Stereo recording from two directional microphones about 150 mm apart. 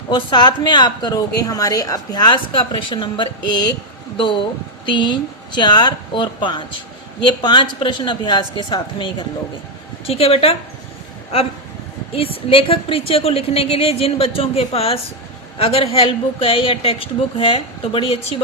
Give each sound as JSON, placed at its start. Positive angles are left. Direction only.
{"t": 0.1, "sound": "speech", "side_deg": 30}
{"t": 4.9, "sound": "a woman's voice", "side_deg": 30}
{"t": 12.1, "sound": "a woman's voice", "side_deg": 40}